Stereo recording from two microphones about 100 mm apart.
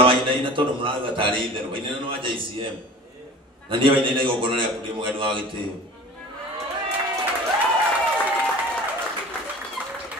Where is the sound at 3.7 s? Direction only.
60° right (ahead or behind).